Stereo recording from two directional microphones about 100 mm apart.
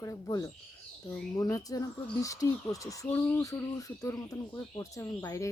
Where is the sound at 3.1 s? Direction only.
20° left (ahead or behind).